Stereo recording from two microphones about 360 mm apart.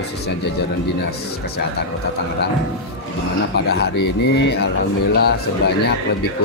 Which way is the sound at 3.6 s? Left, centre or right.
Left.